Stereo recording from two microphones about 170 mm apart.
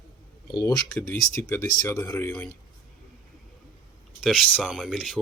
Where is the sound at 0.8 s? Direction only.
5° left (ahead or behind).